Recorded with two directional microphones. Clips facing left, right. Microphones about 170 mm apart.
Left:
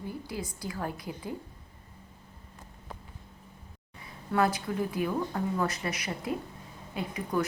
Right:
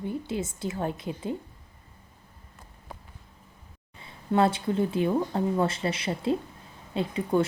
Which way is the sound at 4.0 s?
25° right (ahead or behind).